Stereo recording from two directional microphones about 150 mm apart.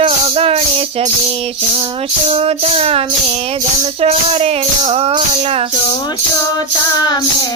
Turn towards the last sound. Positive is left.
turn(degrees=-40)  # may be behind; listen again after turning